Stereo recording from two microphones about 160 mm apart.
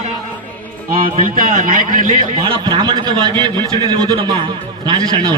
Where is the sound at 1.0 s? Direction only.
60° right (ahead or behind).